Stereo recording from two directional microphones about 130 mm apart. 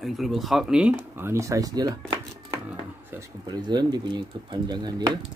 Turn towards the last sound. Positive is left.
turn(degrees=-30)  # may be behind; listen again after turning